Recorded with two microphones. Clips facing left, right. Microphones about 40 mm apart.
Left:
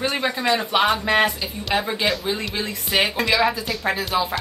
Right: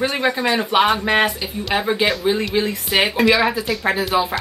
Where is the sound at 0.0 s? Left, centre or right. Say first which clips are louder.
Right 3 dB; centre.